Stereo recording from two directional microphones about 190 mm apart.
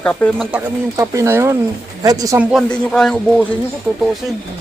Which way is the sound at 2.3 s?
Centre (ahead or behind).